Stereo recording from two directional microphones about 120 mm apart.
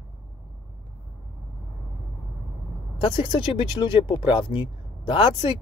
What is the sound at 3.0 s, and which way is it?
Speech, 45° left (ahead or behind).